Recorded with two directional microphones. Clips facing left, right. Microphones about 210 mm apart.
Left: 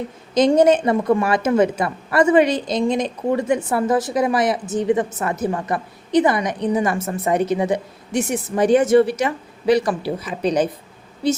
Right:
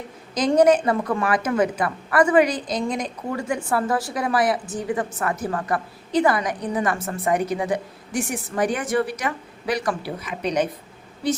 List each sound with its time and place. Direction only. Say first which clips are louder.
0.3 s a woman's voice: left 3 dB; 25° left (ahead or behind)